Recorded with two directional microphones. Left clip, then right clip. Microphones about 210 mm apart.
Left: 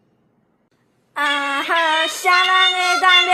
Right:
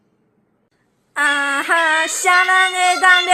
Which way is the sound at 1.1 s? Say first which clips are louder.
Right 3 dB; 10° right (ahead or behind).